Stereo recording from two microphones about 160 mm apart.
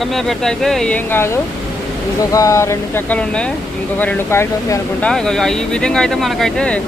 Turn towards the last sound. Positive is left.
turn(degrees=5)  # may be behind; listen again after turning